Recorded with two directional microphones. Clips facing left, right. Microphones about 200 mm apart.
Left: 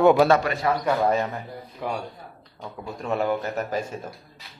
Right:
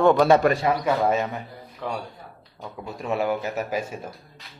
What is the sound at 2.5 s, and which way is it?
A man's voice, 5° right (ahead or behind).